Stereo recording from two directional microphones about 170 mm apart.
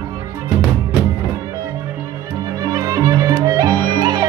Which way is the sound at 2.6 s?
20° right (ahead or behind).